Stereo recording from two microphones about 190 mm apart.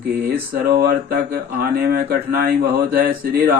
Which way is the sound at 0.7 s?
55° right (ahead or behind).